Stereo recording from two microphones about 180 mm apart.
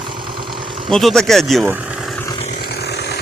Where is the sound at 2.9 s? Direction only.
70° left (ahead or behind).